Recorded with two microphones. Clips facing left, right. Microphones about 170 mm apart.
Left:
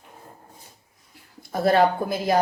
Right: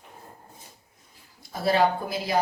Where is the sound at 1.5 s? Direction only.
55° left (ahead or behind).